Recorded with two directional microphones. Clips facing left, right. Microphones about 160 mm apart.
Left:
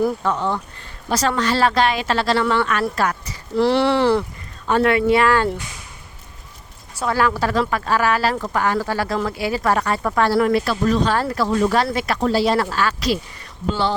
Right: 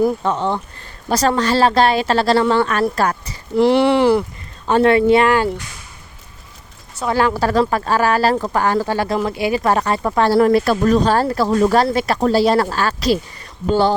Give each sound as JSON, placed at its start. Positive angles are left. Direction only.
{"t": 0.0, "sound": "speech", "side_deg": -20}
{"t": 1.1, "sound": "a woman's voice", "side_deg": -35}
{"t": 3.5, "sound": "speech", "side_deg": -15}
{"t": 4.6, "sound": "speech", "side_deg": -30}
{"t": 7.1, "sound": "speech", "side_deg": -25}
{"t": 13.7, "sound": "speech", "side_deg": -45}